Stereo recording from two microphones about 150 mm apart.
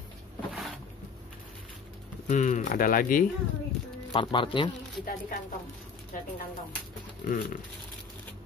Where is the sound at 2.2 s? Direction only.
55° left (ahead or behind).